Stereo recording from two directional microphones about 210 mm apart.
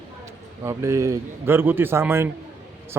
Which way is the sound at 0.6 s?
15° right (ahead or behind).